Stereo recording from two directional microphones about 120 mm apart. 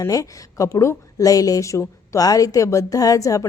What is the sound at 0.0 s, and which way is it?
A woman's voice, 30° left (ahead or behind).